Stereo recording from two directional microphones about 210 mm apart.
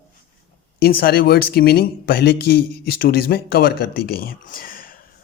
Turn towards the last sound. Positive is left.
turn(degrees=40)  # may be behind; listen again after turning